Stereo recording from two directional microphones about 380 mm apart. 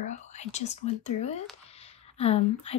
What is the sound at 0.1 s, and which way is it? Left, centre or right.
Speech, centre.